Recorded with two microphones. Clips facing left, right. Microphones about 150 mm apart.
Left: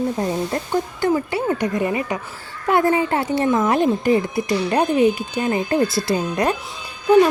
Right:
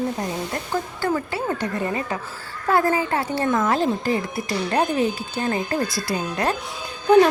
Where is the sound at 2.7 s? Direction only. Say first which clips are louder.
Left 3 dB; 25° left (ahead or behind).